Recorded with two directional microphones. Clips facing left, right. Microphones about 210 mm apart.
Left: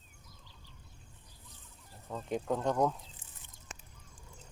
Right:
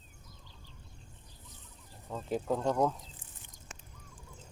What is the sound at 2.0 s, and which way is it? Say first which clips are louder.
Speech: right 1 dB; centre (ahead or behind).